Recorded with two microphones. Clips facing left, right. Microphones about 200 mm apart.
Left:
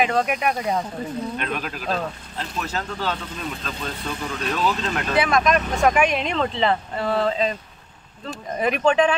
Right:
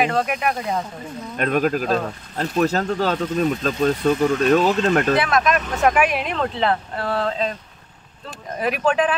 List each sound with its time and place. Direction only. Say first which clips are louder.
0.0 s speech: even; centre (ahead or behind)
1.4 s speech: right 9 dB; 45° right (ahead or behind)
5.2 s speech: even; centre (ahead or behind)
8.5 s speech: left 1 dB; 5° right (ahead or behind)